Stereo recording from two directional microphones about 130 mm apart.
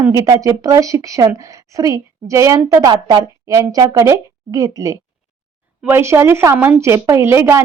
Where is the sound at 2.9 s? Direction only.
35° right (ahead or behind).